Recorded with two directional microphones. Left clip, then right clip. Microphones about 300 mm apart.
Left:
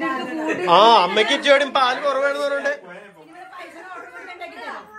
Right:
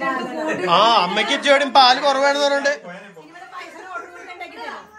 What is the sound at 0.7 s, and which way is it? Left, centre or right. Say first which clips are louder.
Speech: left 2 dB; centre.